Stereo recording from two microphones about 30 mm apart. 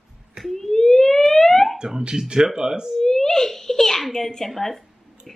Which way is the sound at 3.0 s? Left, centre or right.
Centre.